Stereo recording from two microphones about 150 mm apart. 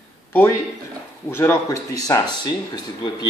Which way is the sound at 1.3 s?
20° left (ahead or behind).